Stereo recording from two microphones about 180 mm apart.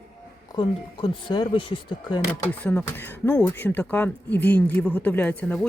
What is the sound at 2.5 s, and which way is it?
Speech, 10° left (ahead or behind).